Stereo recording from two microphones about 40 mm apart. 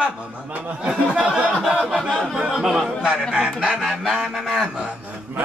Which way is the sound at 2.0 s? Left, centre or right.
Centre.